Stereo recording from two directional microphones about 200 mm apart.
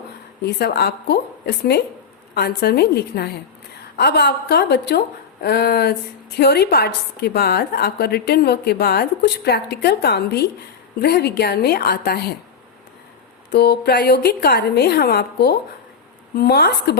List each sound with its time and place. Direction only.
0.4 s a woman's voice: 55° left (ahead or behind)
13.5 s a woman's voice: 55° left (ahead or behind)